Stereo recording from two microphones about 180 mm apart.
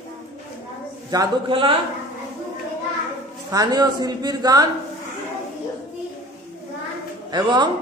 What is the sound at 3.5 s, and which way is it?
Speech, 20° right (ahead or behind).